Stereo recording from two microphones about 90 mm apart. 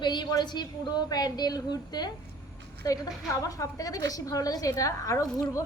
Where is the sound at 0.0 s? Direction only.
55° left (ahead or behind).